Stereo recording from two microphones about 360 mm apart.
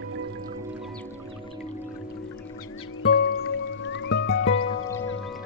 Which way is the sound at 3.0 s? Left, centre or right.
Left.